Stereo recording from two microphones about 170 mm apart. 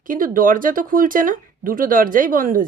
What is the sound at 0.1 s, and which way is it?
A woman's voice, 55° right (ahead or behind).